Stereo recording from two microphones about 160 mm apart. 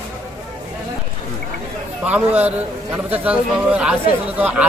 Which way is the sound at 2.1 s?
10° right (ahead or behind).